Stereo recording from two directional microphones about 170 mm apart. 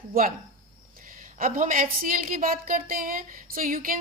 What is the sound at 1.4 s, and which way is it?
A woman's voice, 55° right (ahead or behind).